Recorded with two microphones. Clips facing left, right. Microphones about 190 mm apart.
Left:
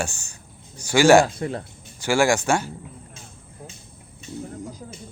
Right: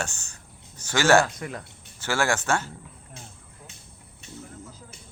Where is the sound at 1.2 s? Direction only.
30° left (ahead or behind).